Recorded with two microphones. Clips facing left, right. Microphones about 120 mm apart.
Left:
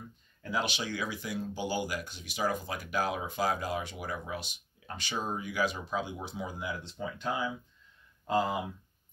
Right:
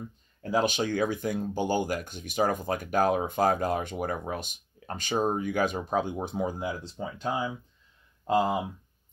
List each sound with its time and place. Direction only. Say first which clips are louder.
0.4 s speech: right 7 dB; 40° right (ahead or behind)